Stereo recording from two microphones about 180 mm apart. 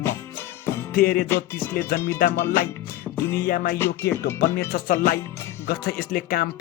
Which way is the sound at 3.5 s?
55° left (ahead or behind).